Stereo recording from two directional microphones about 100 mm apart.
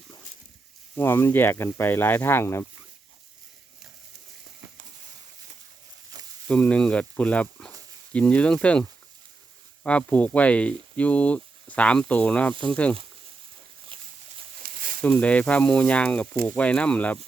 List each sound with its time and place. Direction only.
0.9 s speech: 20° left (ahead or behind)
6.1 s sizzle: 40° right (ahead or behind)
6.5 s speech: 10° left (ahead or behind)
13.9 s a sound: 60° right (ahead or behind)
15.0 s speech: 15° left (ahead or behind)